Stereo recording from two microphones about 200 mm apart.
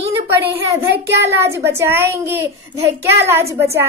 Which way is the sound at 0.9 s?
60° right (ahead or behind).